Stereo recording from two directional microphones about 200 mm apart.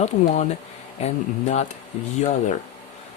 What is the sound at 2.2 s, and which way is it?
Speech, 35° left (ahead or behind).